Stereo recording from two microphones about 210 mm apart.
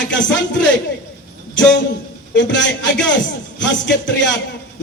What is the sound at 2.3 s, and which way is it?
Speech, 60° left (ahead or behind).